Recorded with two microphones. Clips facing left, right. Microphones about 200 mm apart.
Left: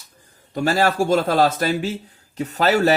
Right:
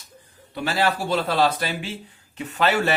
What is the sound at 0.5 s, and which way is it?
Speech, 45° left (ahead or behind).